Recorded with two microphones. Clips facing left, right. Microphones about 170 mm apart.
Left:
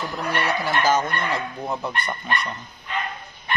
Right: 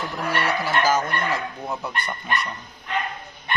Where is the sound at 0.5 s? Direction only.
10° right (ahead or behind).